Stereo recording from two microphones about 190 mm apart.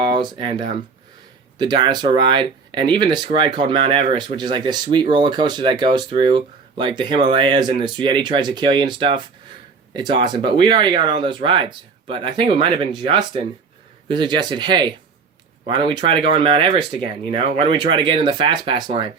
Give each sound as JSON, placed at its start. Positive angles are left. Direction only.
{"t": 0.0, "sound": "speech", "side_deg": -20}